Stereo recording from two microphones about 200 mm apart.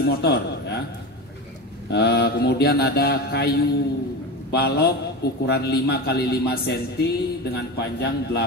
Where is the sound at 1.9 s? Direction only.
55° left (ahead or behind).